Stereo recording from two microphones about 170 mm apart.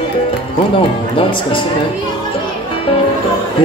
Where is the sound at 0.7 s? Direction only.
30° left (ahead or behind).